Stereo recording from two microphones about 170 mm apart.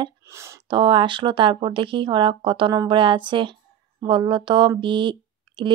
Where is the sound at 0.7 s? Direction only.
30° right (ahead or behind).